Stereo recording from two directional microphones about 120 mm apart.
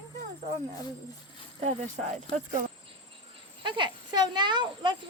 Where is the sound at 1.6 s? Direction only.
75° right (ahead or behind).